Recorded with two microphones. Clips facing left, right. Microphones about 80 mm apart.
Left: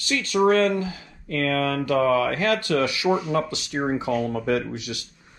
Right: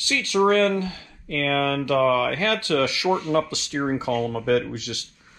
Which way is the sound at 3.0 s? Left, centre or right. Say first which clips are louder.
Even; centre.